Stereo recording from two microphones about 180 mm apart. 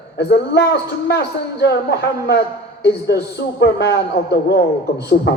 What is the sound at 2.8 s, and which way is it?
Speech, 70° left (ahead or behind).